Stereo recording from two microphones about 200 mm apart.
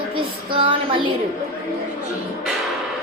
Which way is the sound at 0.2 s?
25° right (ahead or behind).